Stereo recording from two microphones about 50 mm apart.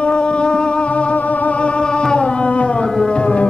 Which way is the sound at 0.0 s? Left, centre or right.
Left.